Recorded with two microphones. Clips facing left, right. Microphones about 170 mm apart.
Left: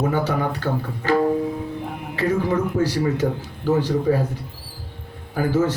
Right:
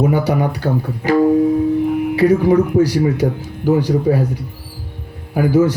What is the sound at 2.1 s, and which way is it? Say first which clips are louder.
Speech: right 7 dB; 15° right (ahead or behind).